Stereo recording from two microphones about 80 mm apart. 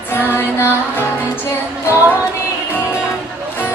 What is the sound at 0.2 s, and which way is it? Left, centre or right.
Female singing, left.